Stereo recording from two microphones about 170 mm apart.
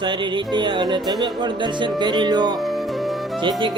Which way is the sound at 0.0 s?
25° right (ahead or behind).